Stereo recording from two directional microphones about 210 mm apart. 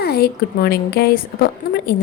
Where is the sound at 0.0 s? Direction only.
50° left (ahead or behind).